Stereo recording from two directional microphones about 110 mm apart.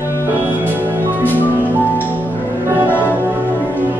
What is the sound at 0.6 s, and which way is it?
Music, 15° right (ahead or behind).